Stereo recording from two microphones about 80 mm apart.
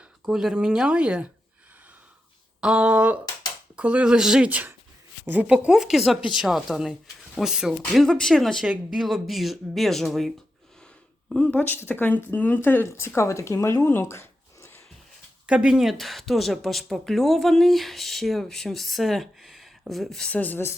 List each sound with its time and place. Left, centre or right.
0.3 s speech: centre
2.6 s speech: centre
7.9 s speech: centre
8.6 s speech: centre
9.0 s speech: centre
11.3 s speech: centre
11.7 s speech: left
13.8 s a sound: left
15.4 s speech: centre
20.3 s speech: left